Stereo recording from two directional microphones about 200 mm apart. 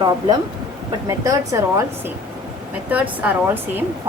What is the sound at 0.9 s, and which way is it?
Speech, 15° right (ahead or behind).